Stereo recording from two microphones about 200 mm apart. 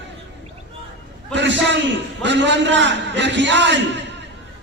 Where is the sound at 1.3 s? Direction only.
60° right (ahead or behind).